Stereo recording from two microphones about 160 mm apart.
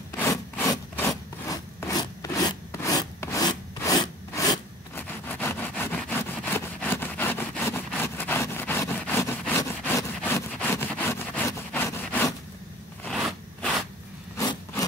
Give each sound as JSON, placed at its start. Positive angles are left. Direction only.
{"t": 0.3, "sound": "wood", "side_deg": 15}
{"t": 9.6, "sound": "vehicle", "side_deg": 20}
{"t": 13.0, "sound": "zipper", "side_deg": 5}
{"t": 14.3, "sound": "rub", "side_deg": 20}